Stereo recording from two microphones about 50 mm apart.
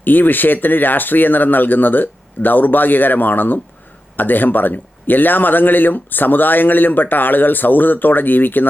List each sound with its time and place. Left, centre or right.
0.0 s a man's voice: left